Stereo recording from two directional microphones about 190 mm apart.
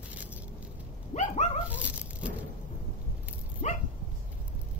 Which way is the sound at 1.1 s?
35° left (ahead or behind).